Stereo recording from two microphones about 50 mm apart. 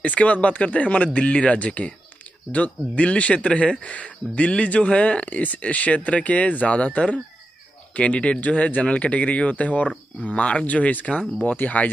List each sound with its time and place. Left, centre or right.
0.0 s speech: left
7.9 s speech: left